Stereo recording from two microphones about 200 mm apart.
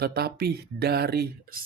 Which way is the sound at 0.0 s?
50° right (ahead or behind).